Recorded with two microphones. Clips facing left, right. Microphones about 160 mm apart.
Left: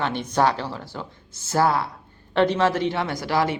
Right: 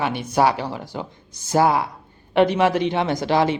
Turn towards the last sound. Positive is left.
turn(degrees=-20)  # may be behind; listen again after turning